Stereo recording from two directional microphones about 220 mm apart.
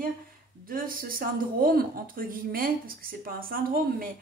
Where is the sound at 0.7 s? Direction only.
40° right (ahead or behind).